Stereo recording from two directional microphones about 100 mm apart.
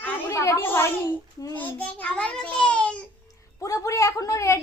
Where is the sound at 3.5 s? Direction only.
35° left (ahead or behind).